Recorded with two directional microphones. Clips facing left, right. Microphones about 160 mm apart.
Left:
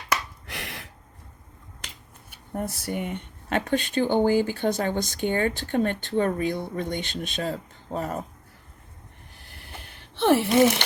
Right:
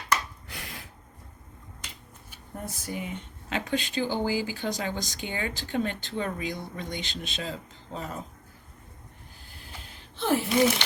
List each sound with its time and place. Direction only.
0.4 s gasp: 75° left (ahead or behind)
2.3 s speech: 65° left (ahead or behind)
9.5 s a sound: 65° left (ahead or behind)